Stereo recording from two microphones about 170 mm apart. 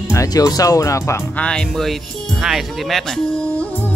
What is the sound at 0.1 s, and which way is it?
Speech, 20° left (ahead or behind).